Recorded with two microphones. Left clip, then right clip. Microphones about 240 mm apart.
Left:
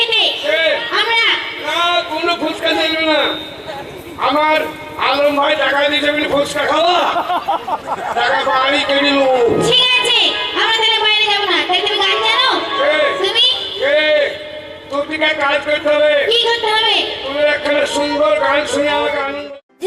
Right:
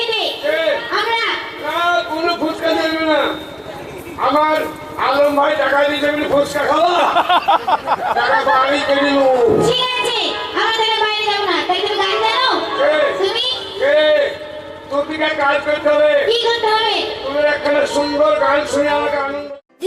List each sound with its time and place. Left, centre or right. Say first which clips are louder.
0.0 s a sound: left 4 dB; centre
4.2 s a man's voice: left 1 dB; centre
9.6 s music: left 3 dB; centre
15.2 s speech: left 2 dB; centre
18.9 s a woman's voice: left 1 dB; centre